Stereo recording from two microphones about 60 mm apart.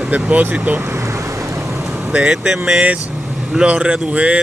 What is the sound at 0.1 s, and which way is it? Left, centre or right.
Speech, right.